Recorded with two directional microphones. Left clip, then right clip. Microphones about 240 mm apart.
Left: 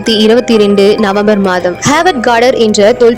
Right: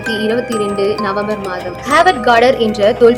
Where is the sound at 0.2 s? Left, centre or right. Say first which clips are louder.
Left 11 dB; left.